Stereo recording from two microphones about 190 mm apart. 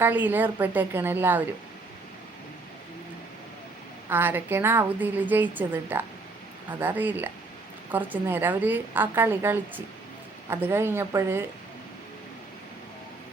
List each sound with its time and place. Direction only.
0.0 s a woman's voice: 10° right (ahead or behind)
4.1 s a woman's voice: 10° right (ahead or behind)